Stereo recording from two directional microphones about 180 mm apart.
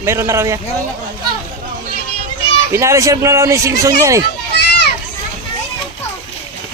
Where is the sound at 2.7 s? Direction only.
15° right (ahead or behind).